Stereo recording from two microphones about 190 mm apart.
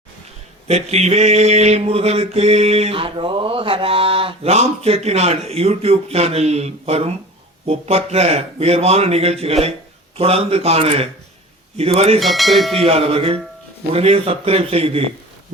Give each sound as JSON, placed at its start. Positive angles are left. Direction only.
{"t": 0.7, "sound": "mantra", "side_deg": -35}
{"t": 12.2, "sound": "speech", "side_deg": 0}
{"t": 12.8, "sound": "music", "side_deg": -30}
{"t": 13.9, "sound": "mantra", "side_deg": -30}